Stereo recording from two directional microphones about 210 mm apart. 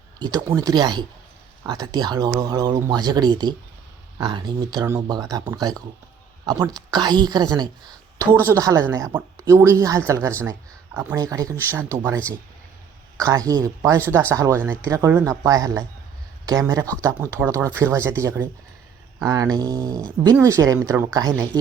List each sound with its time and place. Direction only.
0.2 s speech: 15° right (ahead or behind)